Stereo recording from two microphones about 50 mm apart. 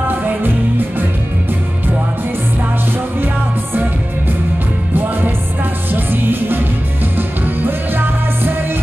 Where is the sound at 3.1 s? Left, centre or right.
Right.